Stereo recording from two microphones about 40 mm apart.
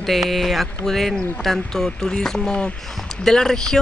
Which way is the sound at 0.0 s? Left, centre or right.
Centre.